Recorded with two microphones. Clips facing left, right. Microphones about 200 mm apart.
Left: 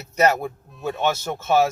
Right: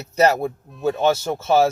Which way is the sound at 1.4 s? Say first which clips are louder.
Right 1 dB; 30° right (ahead or behind).